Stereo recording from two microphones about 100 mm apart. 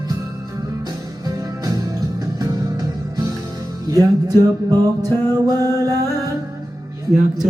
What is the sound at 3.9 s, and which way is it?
Music, 35° right (ahead or behind).